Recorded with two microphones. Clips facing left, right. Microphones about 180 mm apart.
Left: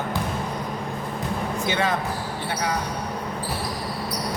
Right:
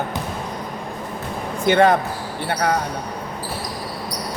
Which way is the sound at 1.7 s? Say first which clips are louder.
Right 11 dB; 55° right (ahead or behind).